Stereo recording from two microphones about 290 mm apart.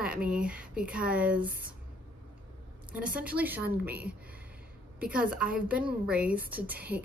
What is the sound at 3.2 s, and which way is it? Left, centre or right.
A woman's voice, centre.